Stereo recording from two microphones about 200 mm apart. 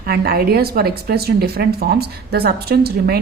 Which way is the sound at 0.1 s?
50° right (ahead or behind).